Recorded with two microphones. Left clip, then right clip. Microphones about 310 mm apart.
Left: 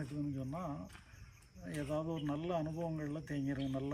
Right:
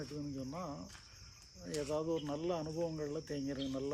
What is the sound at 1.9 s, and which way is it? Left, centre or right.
Speech, centre.